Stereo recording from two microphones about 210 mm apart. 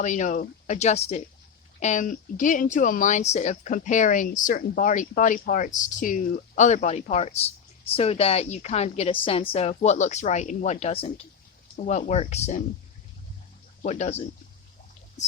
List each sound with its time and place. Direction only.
0.0 s a woman's voice: 35° left (ahead or behind)
13.8 s speech: 35° left (ahead or behind)